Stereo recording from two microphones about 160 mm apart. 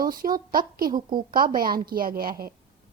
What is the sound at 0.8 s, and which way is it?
A woman's voice, 65° right (ahead or behind).